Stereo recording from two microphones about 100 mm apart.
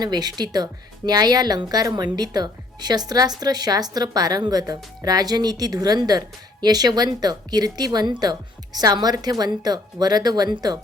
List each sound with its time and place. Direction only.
0.0 s speech: 40° right (ahead or behind)